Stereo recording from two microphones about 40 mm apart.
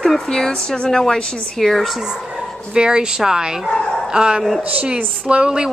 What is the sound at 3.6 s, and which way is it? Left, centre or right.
Speech, centre.